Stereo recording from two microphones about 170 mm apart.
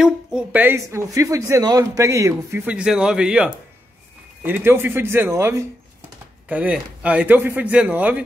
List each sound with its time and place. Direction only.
0.0 s speech: 5° right (ahead or behind)
2.7 s a man's voice: 5° right (ahead or behind)